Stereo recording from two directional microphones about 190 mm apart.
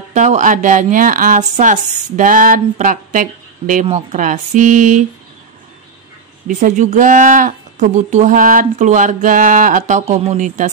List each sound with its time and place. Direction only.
0.1 s speech: 40° right (ahead or behind)
6.4 s speech: 40° right (ahead or behind)